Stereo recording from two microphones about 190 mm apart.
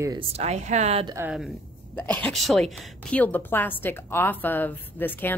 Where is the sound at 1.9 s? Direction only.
10° left (ahead or behind).